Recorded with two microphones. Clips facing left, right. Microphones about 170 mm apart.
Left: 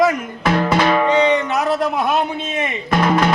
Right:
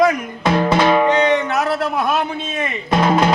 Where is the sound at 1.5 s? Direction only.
15° left (ahead or behind).